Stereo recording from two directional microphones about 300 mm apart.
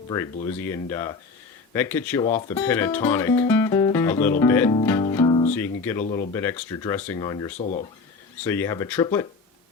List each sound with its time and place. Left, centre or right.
0.7 s speech: centre
6.0 s speech: left
6.3 s speech: centre